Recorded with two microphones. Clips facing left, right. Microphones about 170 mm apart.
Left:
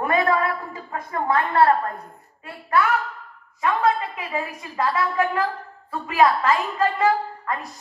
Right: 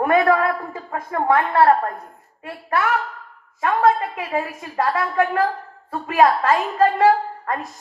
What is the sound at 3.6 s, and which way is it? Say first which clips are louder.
A woman's voice: right 3 dB; 45° right (ahead or behind).